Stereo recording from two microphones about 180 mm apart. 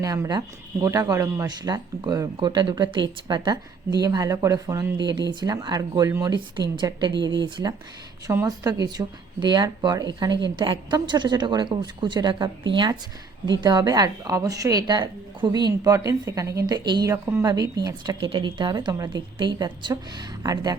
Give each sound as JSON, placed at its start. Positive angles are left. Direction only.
{"t": 0.0, "sound": "speech", "side_deg": -20}